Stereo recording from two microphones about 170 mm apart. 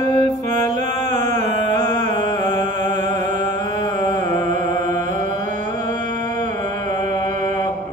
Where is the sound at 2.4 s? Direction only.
45° right (ahead or behind).